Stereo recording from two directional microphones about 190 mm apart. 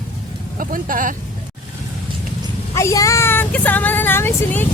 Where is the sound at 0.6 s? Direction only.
45° right (ahead or behind).